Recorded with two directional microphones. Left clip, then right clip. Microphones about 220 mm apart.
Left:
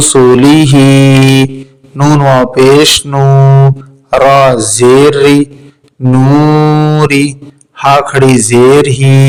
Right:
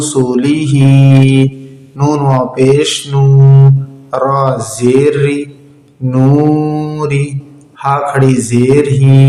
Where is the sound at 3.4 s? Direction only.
65° left (ahead or behind).